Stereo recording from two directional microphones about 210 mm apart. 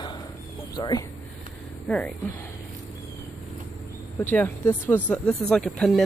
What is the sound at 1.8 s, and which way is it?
Speech, 5° left (ahead or behind).